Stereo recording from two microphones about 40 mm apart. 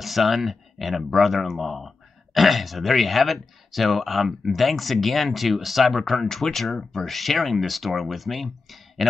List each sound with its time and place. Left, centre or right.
0.0 s speech: centre